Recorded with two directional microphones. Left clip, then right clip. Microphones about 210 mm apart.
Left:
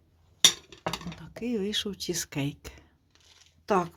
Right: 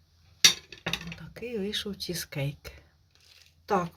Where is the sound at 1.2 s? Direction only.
40° left (ahead or behind).